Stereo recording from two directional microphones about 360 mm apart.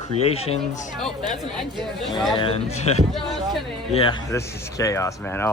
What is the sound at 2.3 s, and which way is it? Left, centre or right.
Speech, centre.